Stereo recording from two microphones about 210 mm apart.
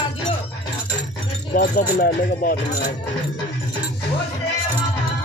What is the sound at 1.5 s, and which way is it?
Speech, 45° left (ahead or behind).